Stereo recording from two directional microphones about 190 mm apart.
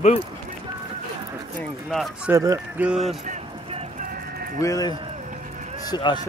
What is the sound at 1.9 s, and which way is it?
Speech, centre (ahead or behind).